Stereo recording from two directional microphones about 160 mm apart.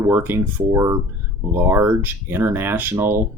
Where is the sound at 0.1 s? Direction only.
15° right (ahead or behind).